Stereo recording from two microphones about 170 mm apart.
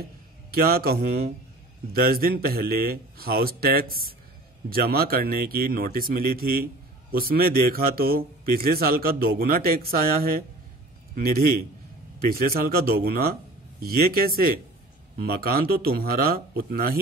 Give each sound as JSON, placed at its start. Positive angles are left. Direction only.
{"t": 0.6, "sound": "speech", "side_deg": -65}